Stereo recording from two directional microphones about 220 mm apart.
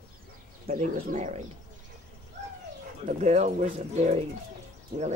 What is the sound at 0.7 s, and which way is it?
Speech, 35° right (ahead or behind).